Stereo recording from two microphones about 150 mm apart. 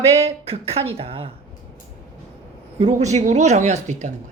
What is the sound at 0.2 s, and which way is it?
Speech, 40° right (ahead or behind).